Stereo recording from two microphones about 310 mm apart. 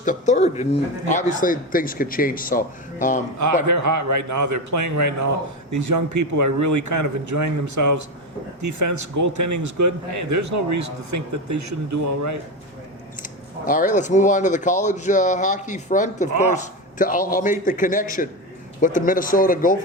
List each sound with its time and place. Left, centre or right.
0.0 s speech: left
3.7 s a man's voice: right
13.2 s speech: left